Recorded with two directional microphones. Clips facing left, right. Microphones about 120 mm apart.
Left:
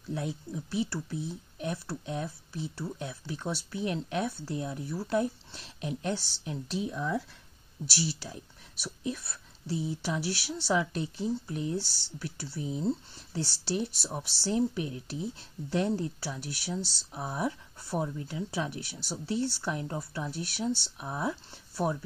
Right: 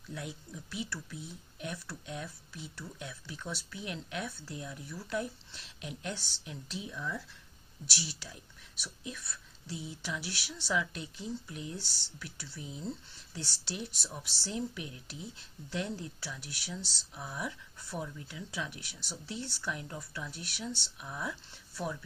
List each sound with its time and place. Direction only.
0.1 s speech: 30° left (ahead or behind); by 7.2 s 50° left (ahead or behind)
7.8 s speech: 35° left (ahead or behind)